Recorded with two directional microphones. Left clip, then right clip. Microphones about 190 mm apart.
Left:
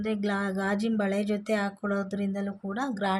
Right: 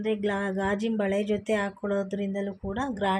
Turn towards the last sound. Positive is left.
turn(degrees=-10)  # may be behind; listen again after turning